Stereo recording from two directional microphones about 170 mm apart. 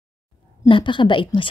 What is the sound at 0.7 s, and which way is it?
Speech, 30° left (ahead or behind).